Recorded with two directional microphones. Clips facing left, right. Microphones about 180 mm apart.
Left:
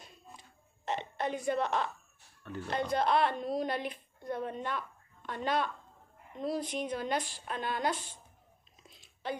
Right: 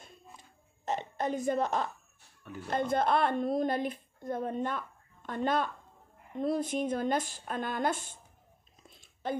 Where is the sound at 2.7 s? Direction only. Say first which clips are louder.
Right 1 dB; 50° right (ahead or behind).